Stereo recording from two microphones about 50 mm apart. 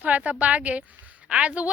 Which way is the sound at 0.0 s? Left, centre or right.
Right.